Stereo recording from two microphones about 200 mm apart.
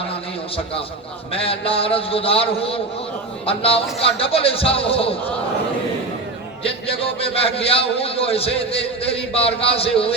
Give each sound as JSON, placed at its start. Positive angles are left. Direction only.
{"t": 1.3, "sound": "a man's voice", "side_deg": 30}
{"t": 6.6, "sound": "a man's voice", "side_deg": 30}